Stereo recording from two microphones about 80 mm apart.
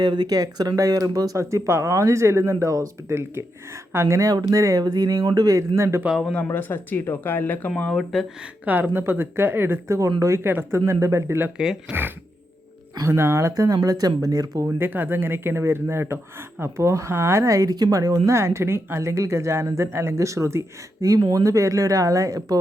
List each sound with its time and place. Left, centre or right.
0.0 s speech: right
1.4 s speech: right
4.3 s speech: right
6.5 s speech: left
8.1 s speech: centre
8.6 s speech: right
11.5 s speech: centre
13.1 s speech: right
14.8 s speech: right
21.2 s speech: right